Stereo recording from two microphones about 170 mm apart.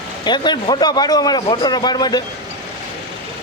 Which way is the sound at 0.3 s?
25° left (ahead or behind).